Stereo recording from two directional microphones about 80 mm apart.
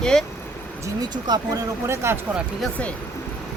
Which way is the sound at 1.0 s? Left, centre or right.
Right.